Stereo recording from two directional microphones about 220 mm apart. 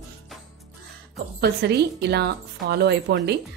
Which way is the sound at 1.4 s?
45° right (ahead or behind).